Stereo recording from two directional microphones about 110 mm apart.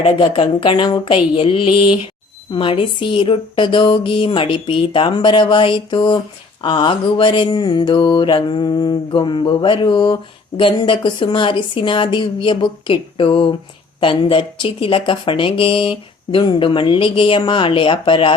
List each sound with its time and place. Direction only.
0.2 s speech: 50° left (ahead or behind)